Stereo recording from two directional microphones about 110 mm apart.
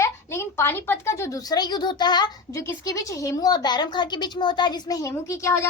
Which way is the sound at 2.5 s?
25° left (ahead or behind).